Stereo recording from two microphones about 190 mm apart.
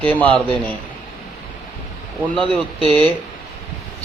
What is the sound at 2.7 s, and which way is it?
Speech, 25° right (ahead or behind).